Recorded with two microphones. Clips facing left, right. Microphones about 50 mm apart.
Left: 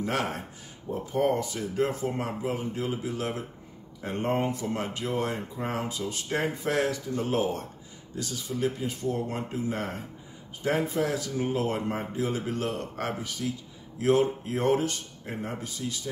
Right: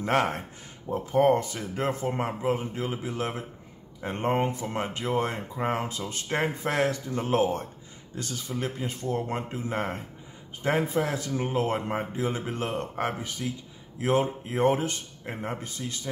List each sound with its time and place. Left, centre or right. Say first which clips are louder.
0.0 s speech: right 4 dB; right